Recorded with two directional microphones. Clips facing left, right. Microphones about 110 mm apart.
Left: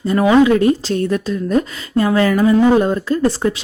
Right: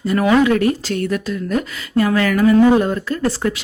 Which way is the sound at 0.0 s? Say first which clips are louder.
Left 3 dB; 25° left (ahead or behind).